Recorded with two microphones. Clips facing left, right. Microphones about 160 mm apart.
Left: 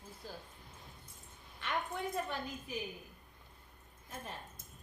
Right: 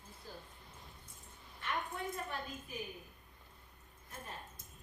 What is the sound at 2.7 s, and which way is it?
Speech, 90° left.